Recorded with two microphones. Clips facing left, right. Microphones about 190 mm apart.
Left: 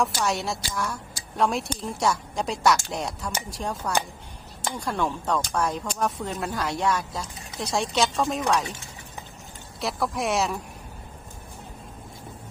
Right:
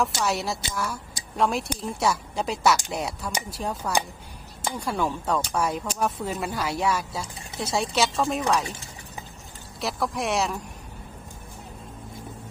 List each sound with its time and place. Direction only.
0.2 s speech: centre (ahead or behind)
8.6 s speech: 35° right (ahead or behind)
9.8 s speech: centre (ahead or behind)